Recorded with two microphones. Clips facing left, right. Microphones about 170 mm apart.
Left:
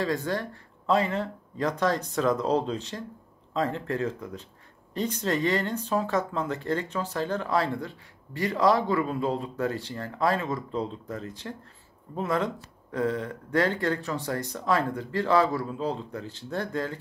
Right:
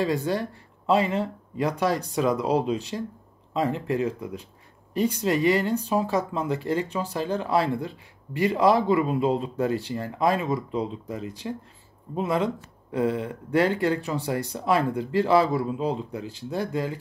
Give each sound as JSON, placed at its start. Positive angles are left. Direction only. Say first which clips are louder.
{"t": 0.0, "sound": "speech", "louder": "right 3 dB", "side_deg": -15}